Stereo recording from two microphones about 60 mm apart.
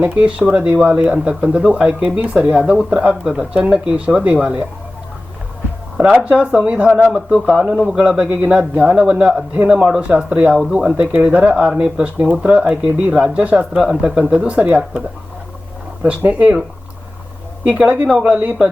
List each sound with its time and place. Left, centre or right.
0.0 s speech: right
0.3 s speech: centre
6.0 s speech: right
16.0 s speech: right
17.7 s speech: right